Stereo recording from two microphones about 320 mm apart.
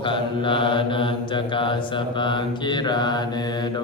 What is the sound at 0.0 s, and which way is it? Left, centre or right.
Mantra, centre.